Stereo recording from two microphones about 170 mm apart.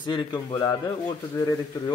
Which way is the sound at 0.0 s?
25° left (ahead or behind).